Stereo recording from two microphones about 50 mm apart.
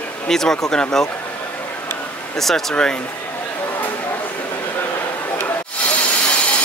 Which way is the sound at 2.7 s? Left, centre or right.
Centre.